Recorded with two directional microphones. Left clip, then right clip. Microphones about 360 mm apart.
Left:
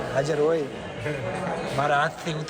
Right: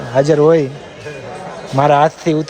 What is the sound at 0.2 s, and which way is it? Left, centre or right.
Speech, right.